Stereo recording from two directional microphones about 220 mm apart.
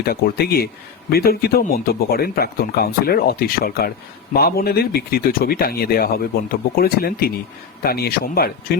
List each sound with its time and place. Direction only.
0.0 s speech: 45° left (ahead or behind)